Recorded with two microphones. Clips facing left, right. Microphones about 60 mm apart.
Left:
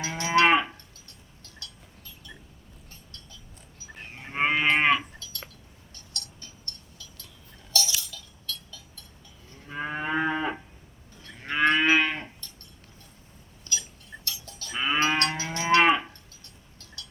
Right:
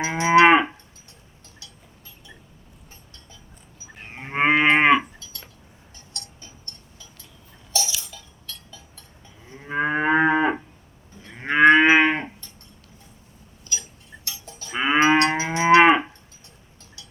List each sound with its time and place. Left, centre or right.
0.0 s moo: right
4.1 s cattle: right
5.9 s cowbell: right
7.7 s a sound: right
9.6 s moo: right
14.3 s livestock: right